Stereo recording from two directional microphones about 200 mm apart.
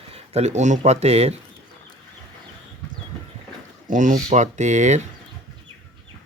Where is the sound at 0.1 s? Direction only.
35° right (ahead or behind).